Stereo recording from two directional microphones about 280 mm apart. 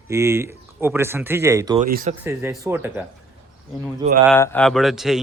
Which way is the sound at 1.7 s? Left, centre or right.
Right.